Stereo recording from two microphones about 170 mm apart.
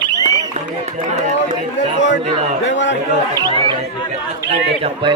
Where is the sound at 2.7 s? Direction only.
90° left.